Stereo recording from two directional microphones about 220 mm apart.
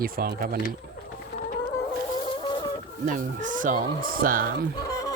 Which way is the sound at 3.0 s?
35° right (ahead or behind).